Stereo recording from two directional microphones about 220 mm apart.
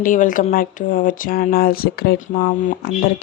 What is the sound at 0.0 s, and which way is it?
A woman's voice, 35° left (ahead or behind).